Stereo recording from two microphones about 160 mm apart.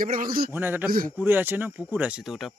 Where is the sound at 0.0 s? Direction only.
60° right (ahead or behind).